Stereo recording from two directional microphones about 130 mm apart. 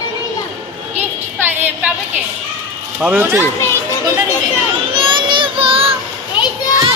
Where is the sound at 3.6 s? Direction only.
20° left (ahead or behind).